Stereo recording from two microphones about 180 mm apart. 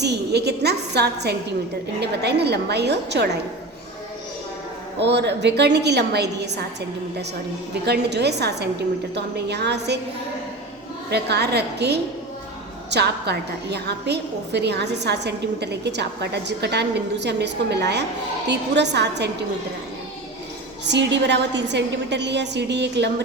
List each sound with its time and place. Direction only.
0.0 s a woman's voice: 70° right (ahead or behind)
4.9 s a woman's voice: 70° right (ahead or behind)
7.9 s a woman's voice: 65° right (ahead or behind)
11.1 s a woman's voice: 65° right (ahead or behind)
20.8 s a woman's voice: 75° right (ahead or behind)